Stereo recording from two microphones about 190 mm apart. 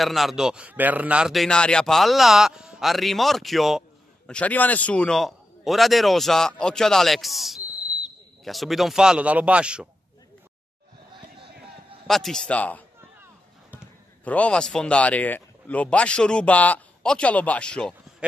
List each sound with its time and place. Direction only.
0.0 s a man's voice: centre (ahead or behind)
12.1 s a man's voice: centre (ahead or behind)
14.2 s speech: 5° left (ahead or behind)